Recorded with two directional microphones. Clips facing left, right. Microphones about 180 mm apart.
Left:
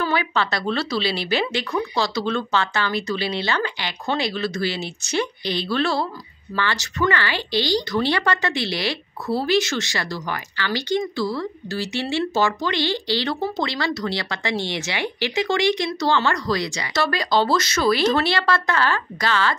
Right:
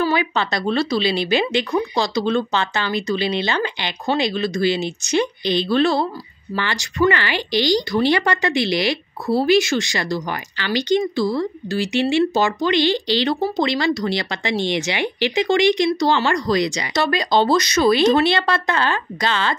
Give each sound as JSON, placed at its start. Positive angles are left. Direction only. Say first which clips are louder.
{"t": 0.1, "sound": "speech", "louder": "right 2 dB", "side_deg": -20}